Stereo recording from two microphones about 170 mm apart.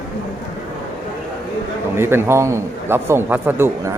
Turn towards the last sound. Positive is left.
turn(degrees=-15)  # may be behind; listen again after turning